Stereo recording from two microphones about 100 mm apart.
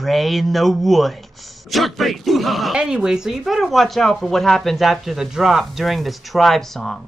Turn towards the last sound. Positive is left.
turn(degrees=5)  # may be behind; listen again after turning